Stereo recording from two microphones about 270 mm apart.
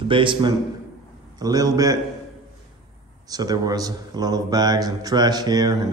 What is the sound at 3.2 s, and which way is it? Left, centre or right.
Speech, centre.